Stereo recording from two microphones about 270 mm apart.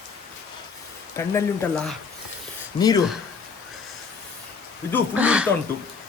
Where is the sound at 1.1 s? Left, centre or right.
Centre.